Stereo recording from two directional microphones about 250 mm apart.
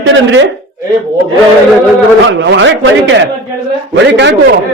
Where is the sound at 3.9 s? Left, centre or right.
Right.